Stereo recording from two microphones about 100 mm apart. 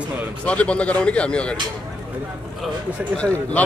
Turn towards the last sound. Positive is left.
turn(degrees=15)  # may be behind; listen again after turning